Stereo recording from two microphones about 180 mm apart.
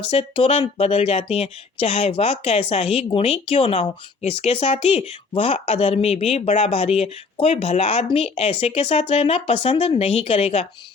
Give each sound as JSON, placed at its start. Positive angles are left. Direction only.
{"t": 0.1, "sound": "speech", "side_deg": 30}